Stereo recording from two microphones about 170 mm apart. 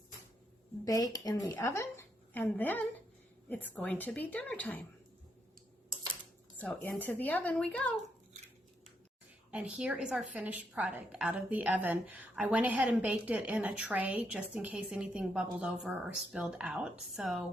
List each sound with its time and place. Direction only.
0.9 s speech: 20° left (ahead or behind)
6.6 s speech: 10° left (ahead or behind)
9.5 s a woman's voice: 5° right (ahead or behind)